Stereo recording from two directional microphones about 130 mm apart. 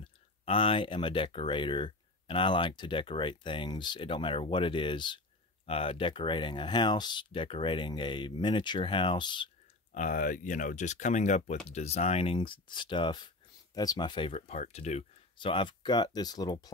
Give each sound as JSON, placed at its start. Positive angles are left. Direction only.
{"t": 0.0, "sound": "speech", "side_deg": 45}
{"t": 9.9, "sound": "speech", "side_deg": 85}
{"t": 12.4, "sound": "speech", "side_deg": 35}
{"t": 15.3, "sound": "speech", "side_deg": 40}